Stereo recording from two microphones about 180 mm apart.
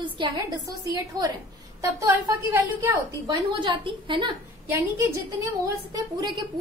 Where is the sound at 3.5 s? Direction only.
25° right (ahead or behind).